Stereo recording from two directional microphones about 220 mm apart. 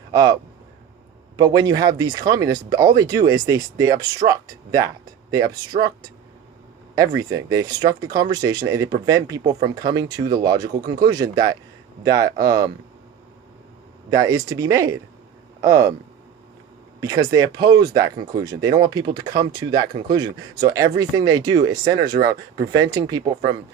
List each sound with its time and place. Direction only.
0.1 s speech: 15° right (ahead or behind)
1.4 s speech: 20° right (ahead or behind)
14.1 s speech: 15° right (ahead or behind)
17.0 s speech: 15° right (ahead or behind)